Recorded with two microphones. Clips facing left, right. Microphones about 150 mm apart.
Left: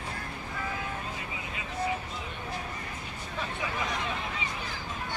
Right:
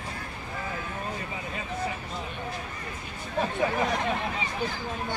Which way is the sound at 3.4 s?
45° right (ahead or behind).